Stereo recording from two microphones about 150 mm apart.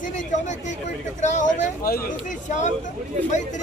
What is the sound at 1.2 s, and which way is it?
Speech, 55° left (ahead or behind).